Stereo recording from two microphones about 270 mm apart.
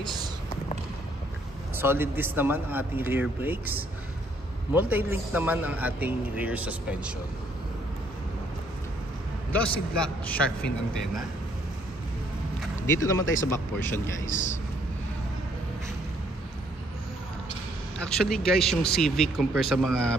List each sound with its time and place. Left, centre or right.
1.8 s a man's voice: centre
9.5 s a man's voice: centre
12.8 s speech: centre
14.2 s a man's voice: left
18.0 s a man's voice: centre